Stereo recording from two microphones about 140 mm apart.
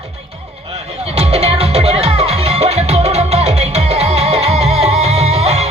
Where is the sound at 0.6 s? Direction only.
45° right (ahead or behind).